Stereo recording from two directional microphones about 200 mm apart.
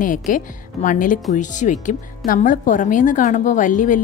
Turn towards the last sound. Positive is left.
turn(degrees=40)  # may be behind; listen again after turning